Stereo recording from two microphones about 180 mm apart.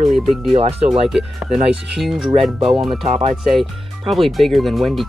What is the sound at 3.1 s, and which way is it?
Speech, 40° right (ahead or behind).